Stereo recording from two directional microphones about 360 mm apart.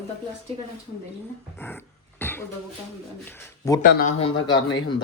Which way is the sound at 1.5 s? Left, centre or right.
Centre.